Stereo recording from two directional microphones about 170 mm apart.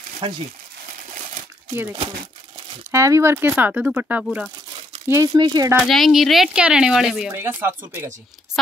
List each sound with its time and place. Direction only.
0.2 s speech: 30° right (ahead or behind)
2.9 s speech: 15° right (ahead or behind)
5.0 s speech: 15° right (ahead or behind)
5.8 s speech: centre (ahead or behind)